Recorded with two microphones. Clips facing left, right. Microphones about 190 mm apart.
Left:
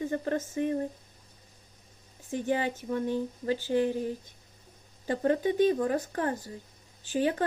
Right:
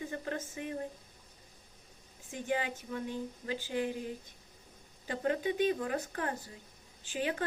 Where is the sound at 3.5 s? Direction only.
40° left (ahead or behind).